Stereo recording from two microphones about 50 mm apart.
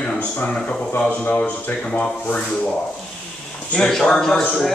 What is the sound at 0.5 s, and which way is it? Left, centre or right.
Speech, centre.